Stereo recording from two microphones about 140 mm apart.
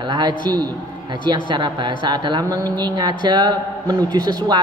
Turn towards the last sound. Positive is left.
turn(degrees=-30)  # may be behind; listen again after turning